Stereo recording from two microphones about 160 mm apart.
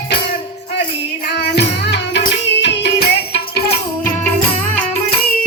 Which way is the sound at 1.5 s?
90° left.